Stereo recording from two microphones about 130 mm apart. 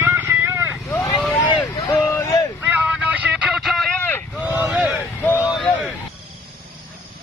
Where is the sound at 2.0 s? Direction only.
20° left (ahead or behind).